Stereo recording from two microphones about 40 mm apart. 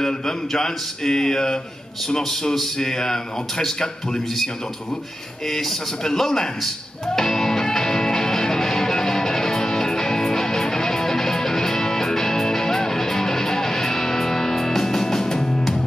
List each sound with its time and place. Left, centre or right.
0.0 s a man's voice: centre
5.5 s a man's voice: centre
7.2 s music: centre